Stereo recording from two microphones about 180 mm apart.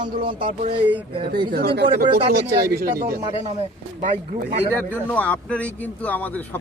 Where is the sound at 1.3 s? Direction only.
60° right (ahead or behind).